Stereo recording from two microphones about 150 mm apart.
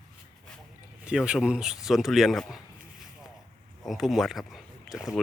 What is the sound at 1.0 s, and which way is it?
Speech, 5° right (ahead or behind).